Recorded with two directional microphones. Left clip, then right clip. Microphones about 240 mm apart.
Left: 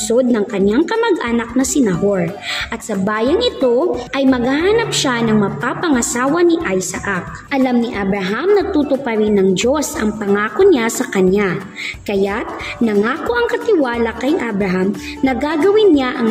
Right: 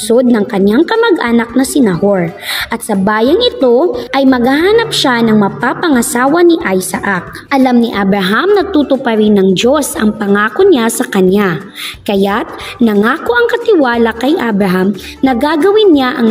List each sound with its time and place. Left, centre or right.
0.1 s a woman's voice: right